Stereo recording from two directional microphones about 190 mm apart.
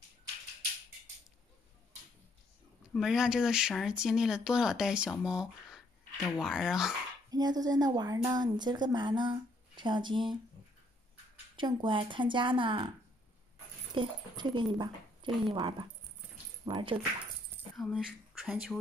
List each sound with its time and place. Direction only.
2.9 s speech: centre (ahead or behind)
7.2 s a woman's voice: 20° right (ahead or behind)
11.5 s a woman's voice: 25° right (ahead or behind)
13.9 s a woman's voice: 25° right (ahead or behind)
17.7 s speech: 5° right (ahead or behind)